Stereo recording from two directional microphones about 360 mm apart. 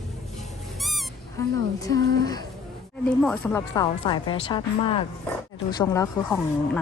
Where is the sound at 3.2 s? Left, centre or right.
Centre.